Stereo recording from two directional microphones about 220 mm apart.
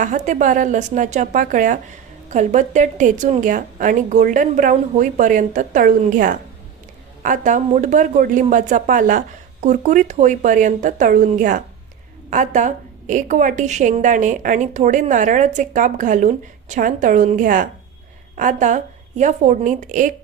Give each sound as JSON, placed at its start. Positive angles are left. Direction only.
{"t": 0.0, "sound": "a woman's voice", "side_deg": -35}